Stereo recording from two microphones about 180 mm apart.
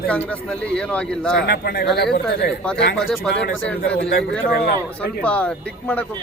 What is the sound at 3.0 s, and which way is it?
Speech, centre (ahead or behind).